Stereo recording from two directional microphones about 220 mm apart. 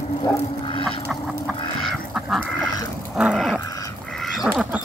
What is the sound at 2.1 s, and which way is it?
Duck, centre (ahead or behind).